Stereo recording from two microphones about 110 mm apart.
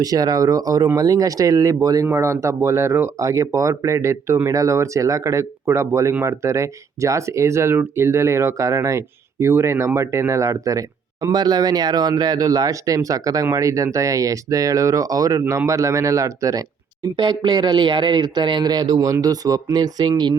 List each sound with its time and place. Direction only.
0.0 s speech: 35° right (ahead or behind)
17.2 s speech: 45° right (ahead or behind)